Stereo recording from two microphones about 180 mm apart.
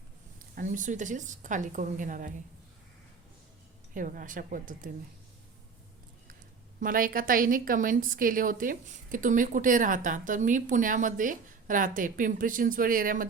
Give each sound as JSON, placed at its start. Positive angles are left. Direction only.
{"t": 0.3, "sound": "a woman's voice", "side_deg": -45}
{"t": 3.9, "sound": "a woman's voice", "side_deg": -50}
{"t": 6.7, "sound": "a woman's voice", "side_deg": -50}